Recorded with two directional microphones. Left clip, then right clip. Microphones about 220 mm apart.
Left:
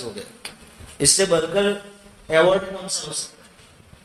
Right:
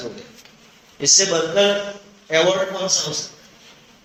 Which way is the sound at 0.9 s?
45° left (ahead or behind).